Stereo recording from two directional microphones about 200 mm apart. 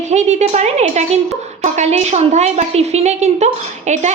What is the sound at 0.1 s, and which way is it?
A woman's voice, 35° right (ahead or behind).